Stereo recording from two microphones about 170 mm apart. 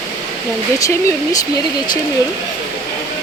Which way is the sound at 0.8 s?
20° left (ahead or behind).